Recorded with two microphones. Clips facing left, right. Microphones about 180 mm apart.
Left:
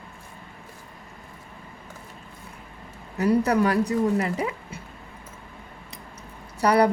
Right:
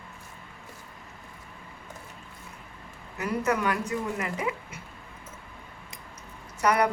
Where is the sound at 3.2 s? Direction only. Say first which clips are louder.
Left 7 dB; 35° left (ahead or behind).